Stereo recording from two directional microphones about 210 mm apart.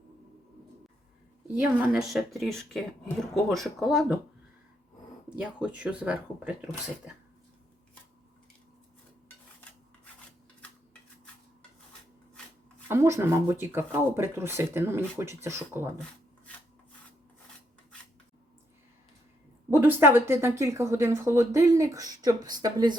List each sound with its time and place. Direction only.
1.5 s speech: 5° right (ahead or behind)
5.4 s speech: 5° right (ahead or behind)
12.9 s speech: 15° right (ahead or behind)
19.7 s speech: 10° right (ahead or behind)